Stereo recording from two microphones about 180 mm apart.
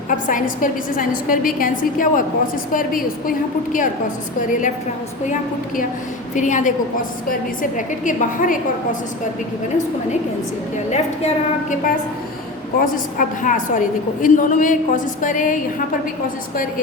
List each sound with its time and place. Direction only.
0.1 s a woman's voice: 50° left (ahead or behind)
6.3 s a woman's voice: 45° left (ahead or behind)
10.9 s a woman's voice: 40° left (ahead or behind)
12.8 s a woman's voice: 45° left (ahead or behind)